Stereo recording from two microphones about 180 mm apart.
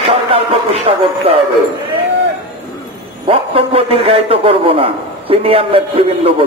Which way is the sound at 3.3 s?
30° right (ahead or behind).